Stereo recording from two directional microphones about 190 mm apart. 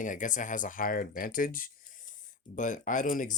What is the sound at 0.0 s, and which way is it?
Speech, 45° left (ahead or behind).